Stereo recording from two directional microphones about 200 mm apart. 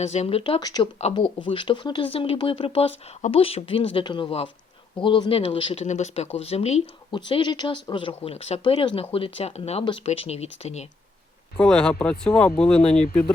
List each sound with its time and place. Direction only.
0.0 s speech: 35° left (ahead or behind)
11.5 s speech: 5° left (ahead or behind)